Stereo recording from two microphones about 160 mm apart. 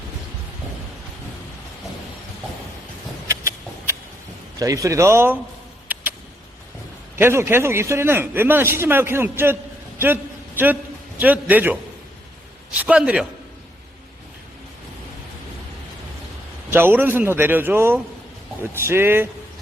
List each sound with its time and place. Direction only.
3.2 s a sound: 20° right (ahead or behind)
4.6 s a man's voice: 20° right (ahead or behind)
5.9 s vehicle: 10° right (ahead or behind)
7.2 s a man's voice: 15° right (ahead or behind)
11.2 s a man's voice: 10° right (ahead or behind)
16.7 s a man's voice: 10° right (ahead or behind)